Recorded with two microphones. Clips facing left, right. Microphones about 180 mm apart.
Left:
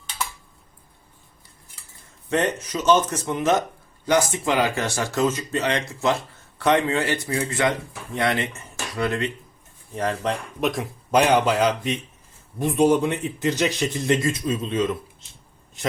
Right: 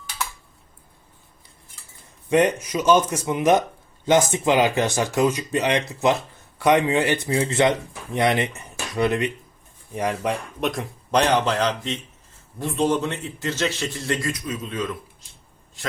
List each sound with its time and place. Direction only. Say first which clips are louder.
2.3 s speech: right 4 dB; 10° right (ahead or behind)
10.6 s a man's voice: left 1 dB; centre (ahead or behind); by 15.9 s 20° left (ahead or behind)